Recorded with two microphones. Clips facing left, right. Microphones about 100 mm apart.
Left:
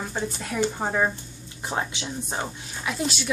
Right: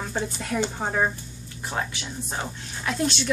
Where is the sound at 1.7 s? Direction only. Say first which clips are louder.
Left 2 dB; 20° left (ahead or behind).